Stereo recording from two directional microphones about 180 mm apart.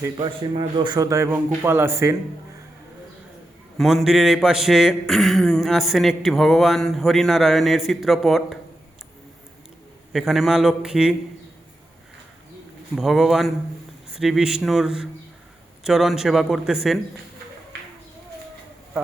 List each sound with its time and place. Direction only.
0.2 s a man's voice: 25° right (ahead or behind)
3.8 s a man's voice: centre (ahead or behind)
10.1 s a man's voice: centre (ahead or behind)
13.0 s a man's voice: centre (ahead or behind)